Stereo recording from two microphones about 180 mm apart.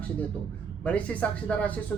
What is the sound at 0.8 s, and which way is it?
Speech, 10° left (ahead or behind).